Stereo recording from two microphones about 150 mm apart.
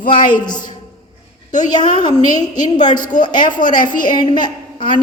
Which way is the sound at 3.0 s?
60° left (ahead or behind).